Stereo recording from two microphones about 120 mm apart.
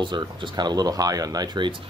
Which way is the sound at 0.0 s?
40° right (ahead or behind).